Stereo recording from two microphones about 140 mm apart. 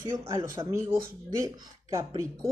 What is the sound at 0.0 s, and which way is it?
Speech, 20° right (ahead or behind).